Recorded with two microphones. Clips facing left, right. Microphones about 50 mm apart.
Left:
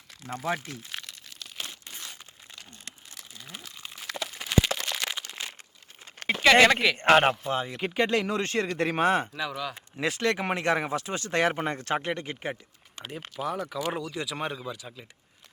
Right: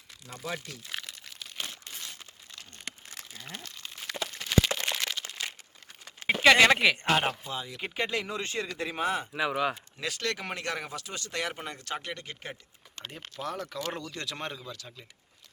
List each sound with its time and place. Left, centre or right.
0.3 s speech: left
0.9 s crumpling: centre
2.8 s crumpling: right
3.5 s a sound: centre
6.2 s speech: centre
7.0 s speech: left
7.8 s speech: left
9.3 s speech: right
9.7 s speech: left
13.0 s speech: centre